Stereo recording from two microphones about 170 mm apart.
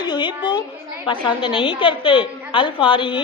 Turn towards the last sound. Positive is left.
turn(degrees=30)  # may be behind; listen again after turning